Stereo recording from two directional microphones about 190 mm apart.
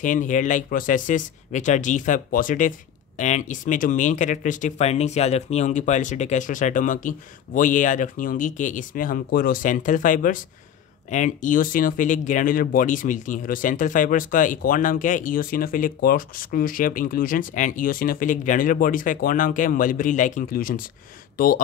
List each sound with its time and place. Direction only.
0.0 s speech: 40° left (ahead or behind)